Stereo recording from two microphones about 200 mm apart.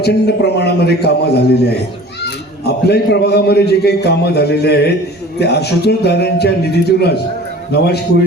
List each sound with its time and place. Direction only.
0.0 s a man's voice: 55° left (ahead or behind)
2.6 s a man's voice: 55° left (ahead or behind)